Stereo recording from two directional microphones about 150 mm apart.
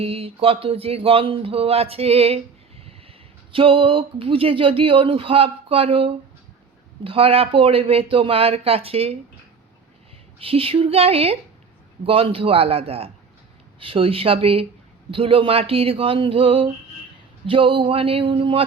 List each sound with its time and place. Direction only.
0.0 s speech: 40° right (ahead or behind)
3.5 s speech: 35° right (ahead or behind)
10.4 s speech: 40° right (ahead or behind)